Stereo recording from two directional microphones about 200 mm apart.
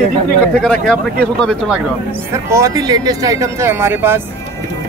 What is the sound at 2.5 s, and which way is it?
Speech, 15° right (ahead or behind).